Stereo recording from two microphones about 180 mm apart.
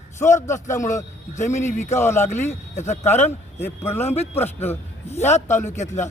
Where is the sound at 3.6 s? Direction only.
10° left (ahead or behind).